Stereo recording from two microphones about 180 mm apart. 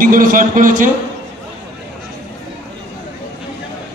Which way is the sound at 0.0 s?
50° right (ahead or behind).